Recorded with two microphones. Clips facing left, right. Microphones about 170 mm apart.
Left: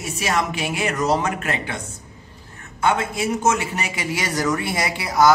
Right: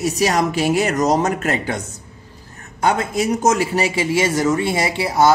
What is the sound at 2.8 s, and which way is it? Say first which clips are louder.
Speech: right 3 dB; 40° right (ahead or behind).